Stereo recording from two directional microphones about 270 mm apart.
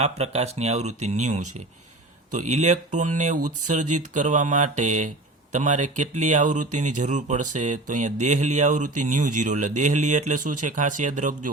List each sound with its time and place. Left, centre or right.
0.0 s speech: right